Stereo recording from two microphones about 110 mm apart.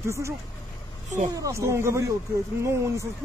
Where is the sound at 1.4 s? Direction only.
30° right (ahead or behind).